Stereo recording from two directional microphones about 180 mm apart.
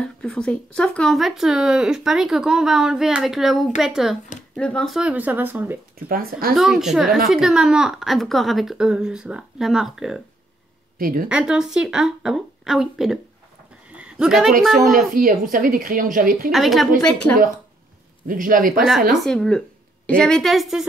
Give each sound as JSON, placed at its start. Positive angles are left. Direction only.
{"t": 0.0, "sound": "speech", "side_deg": 5}
{"t": 5.9, "sound": "a woman's voice", "side_deg": -55}
{"t": 6.5, "sound": "speech", "side_deg": -5}
{"t": 11.0, "sound": "a woman's voice", "side_deg": -50}
{"t": 11.2, "sound": "speech", "side_deg": -5}
{"t": 13.9, "sound": "a sound", "side_deg": -5}
{"t": 15.1, "sound": "a woman's voice", "side_deg": -50}
{"t": 16.5, "sound": "speech", "side_deg": 0}
{"t": 18.2, "sound": "a woman's voice", "side_deg": -50}
{"t": 19.2, "sound": "speech", "side_deg": 5}